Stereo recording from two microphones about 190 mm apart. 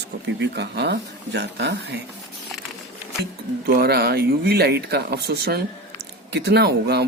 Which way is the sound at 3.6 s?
55° right (ahead or behind).